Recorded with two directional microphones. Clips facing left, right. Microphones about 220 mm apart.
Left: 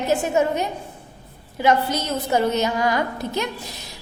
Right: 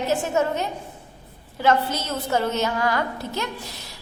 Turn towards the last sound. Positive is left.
turn(degrees=15)  # may be behind; listen again after turning